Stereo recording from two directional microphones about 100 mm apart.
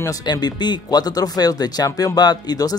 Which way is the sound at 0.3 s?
45° left (ahead or behind).